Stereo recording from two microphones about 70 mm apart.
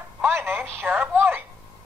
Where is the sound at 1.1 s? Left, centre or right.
Right.